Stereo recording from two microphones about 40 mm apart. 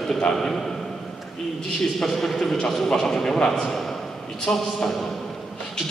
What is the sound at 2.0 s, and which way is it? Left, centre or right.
A man's voice, centre.